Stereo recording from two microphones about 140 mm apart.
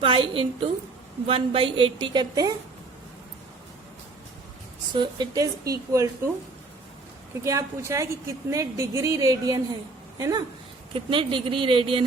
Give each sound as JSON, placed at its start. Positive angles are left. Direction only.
{"t": 0.0, "sound": "a woman's voice", "side_deg": -40}
{"t": 4.9, "sound": "a woman's voice", "side_deg": -30}
{"t": 7.4, "sound": "a woman's voice", "side_deg": -20}
{"t": 10.9, "sound": "a woman's voice", "side_deg": -40}